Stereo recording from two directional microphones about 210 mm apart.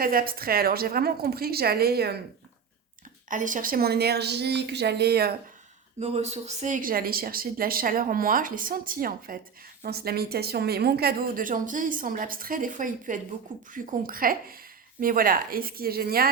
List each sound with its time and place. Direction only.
0.0 s a woman's voice: 45° right (ahead or behind)
3.2 s a woman's voice: 40° right (ahead or behind)
6.0 s a woman's voice: 30° right (ahead or behind); by 16.3 s 45° right (ahead or behind)